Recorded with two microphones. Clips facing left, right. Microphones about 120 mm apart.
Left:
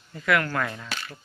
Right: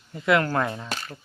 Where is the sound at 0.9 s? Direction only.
40° right (ahead or behind).